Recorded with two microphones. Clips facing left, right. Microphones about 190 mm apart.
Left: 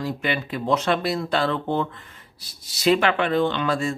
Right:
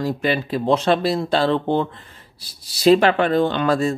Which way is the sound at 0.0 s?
35° right (ahead or behind).